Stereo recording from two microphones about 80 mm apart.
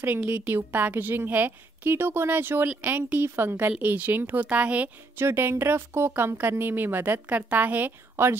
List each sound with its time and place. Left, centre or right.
0.0 s a woman's voice: right
5.1 s a woman's voice: right